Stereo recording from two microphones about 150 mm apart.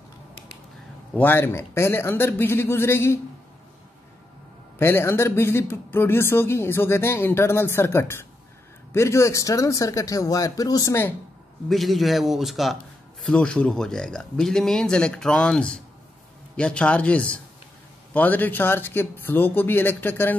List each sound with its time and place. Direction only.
1.1 s speech: 15° left (ahead or behind)
4.7 s speech: 15° left (ahead or behind)
11.7 s speech: centre (ahead or behind)